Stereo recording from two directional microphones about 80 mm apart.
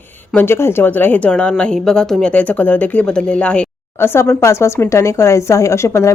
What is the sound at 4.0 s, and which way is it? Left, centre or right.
A woman's voice, left.